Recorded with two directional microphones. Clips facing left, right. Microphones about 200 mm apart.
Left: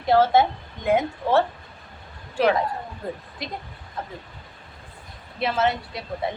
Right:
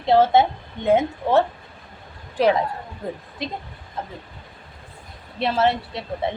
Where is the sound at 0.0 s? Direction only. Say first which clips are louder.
Right 2 dB; 20° right (ahead or behind).